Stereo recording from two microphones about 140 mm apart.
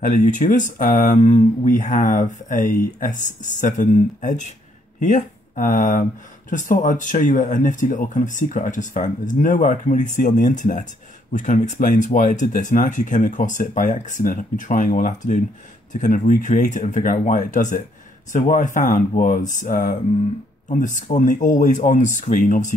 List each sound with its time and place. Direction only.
0.0 s speech: 65° left (ahead or behind)
5.6 s speech: 65° left (ahead or behind)